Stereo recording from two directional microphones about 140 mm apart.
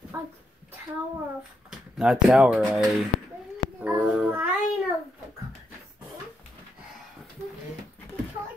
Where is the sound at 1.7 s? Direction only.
5° right (ahead or behind).